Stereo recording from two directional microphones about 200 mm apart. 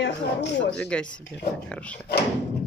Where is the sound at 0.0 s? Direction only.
60° left (ahead or behind).